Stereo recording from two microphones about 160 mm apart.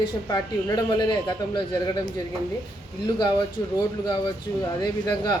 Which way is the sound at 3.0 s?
25° left (ahead or behind).